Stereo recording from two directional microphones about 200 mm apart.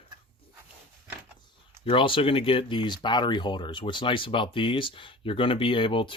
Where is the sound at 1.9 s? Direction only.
25° left (ahead or behind).